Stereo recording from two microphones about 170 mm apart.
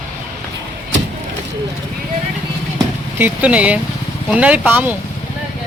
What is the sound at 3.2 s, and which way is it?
Speech, 10° right (ahead or behind).